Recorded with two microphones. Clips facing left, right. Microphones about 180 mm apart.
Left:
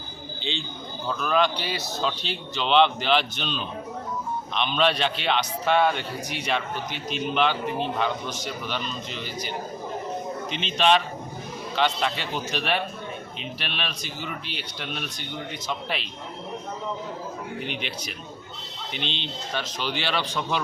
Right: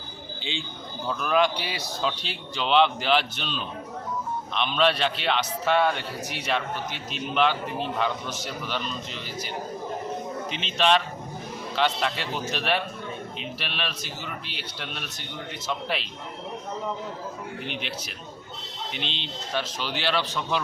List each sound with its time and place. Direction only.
1.0 s a man's voice: 5° right (ahead or behind)
10.5 s a man's voice: centre (ahead or behind)
17.7 s a man's voice: centre (ahead or behind)
18.9 s a man's voice: centre (ahead or behind)